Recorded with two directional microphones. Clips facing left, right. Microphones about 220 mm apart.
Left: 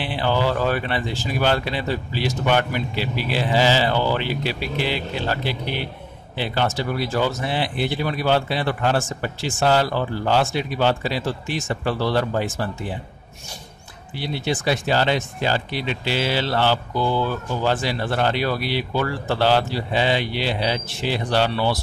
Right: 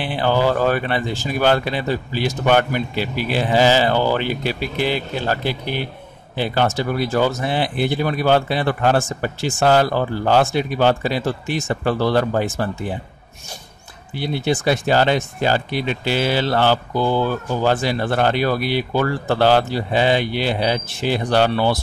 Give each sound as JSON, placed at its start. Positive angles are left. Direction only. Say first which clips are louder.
{"t": 0.0, "sound": "speech", "louder": "right 3 dB", "side_deg": -50}
{"t": 14.1, "sound": "speech", "louder": "right 4 dB", "side_deg": -50}